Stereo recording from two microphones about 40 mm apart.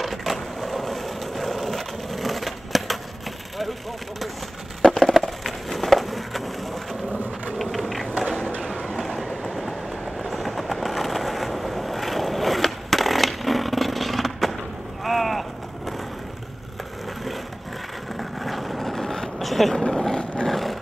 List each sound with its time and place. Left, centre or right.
0.0 s wood: centre
4.8 s a sound: centre
7.1 s a sound: right
8.8 s train: centre
10.3 s vehicle: centre
18.1 s vehicle: centre
19.7 s vehicle: centre